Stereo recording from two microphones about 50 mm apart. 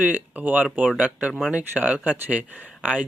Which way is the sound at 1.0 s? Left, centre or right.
Right.